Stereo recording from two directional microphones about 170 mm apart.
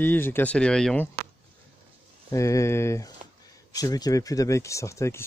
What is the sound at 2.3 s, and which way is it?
Speech, 20° left (ahead or behind).